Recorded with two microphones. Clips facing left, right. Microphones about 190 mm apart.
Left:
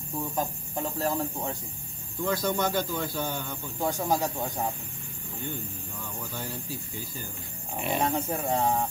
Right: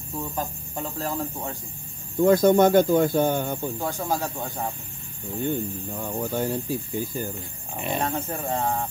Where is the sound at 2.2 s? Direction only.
50° right (ahead or behind).